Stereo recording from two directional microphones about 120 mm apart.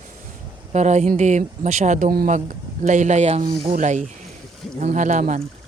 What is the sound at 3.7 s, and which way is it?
Speech, 90° right.